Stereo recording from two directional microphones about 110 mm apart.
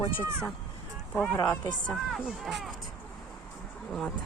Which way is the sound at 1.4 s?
35° left (ahead or behind).